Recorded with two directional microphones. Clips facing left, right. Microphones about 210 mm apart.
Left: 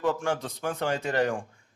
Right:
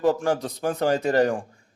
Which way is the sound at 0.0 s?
40° right (ahead or behind).